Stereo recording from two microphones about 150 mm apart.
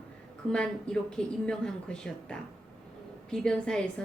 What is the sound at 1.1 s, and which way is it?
A woman's voice, 5° left (ahead or behind).